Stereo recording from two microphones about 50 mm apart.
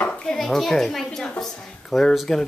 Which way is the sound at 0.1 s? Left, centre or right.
Centre.